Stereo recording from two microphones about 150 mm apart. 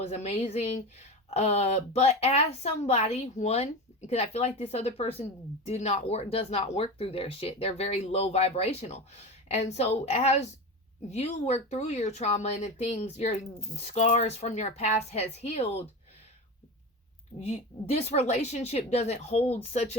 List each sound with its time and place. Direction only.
0.1 s a woman's voice: 45° left (ahead or behind)
17.4 s a woman's voice: 45° left (ahead or behind)